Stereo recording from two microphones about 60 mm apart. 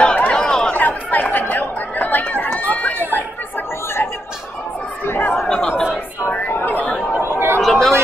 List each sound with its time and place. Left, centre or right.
0.0 s chatter: centre
0.7 s chatter: left
5.0 s chatter: left
5.5 s chatter: centre
6.6 s chatter: left
7.2 s chatter: right
7.6 s chatter: centre